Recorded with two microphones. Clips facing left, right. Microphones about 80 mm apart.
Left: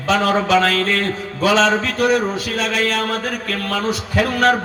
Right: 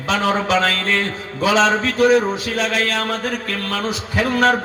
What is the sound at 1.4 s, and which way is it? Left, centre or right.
Speech, centre.